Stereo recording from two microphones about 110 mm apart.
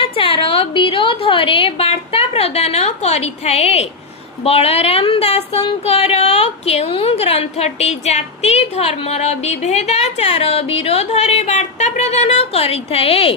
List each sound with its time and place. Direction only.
0.0 s a woman's voice: 55° left (ahead or behind); by 3.8 s 75° left (ahead or behind)
4.4 s speech: 65° left (ahead or behind)